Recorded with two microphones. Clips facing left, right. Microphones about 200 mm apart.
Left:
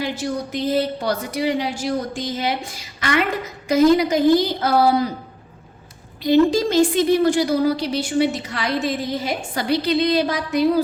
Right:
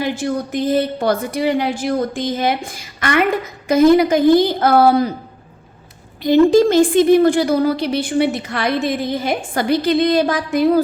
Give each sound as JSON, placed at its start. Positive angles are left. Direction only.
{"t": 0.2, "sound": "a woman's voice", "side_deg": -50}
{"t": 6.2, "sound": "a woman's voice", "side_deg": -55}